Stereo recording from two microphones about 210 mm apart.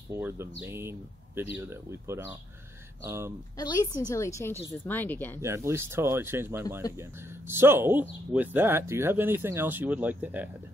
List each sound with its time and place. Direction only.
0.1 s speech: 10° right (ahead or behind)
3.5 s speech: 20° left (ahead or behind)
5.4 s speech: 10° right (ahead or behind)